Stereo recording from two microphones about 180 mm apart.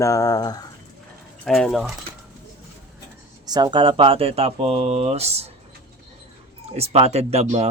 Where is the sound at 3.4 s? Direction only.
25° right (ahead or behind).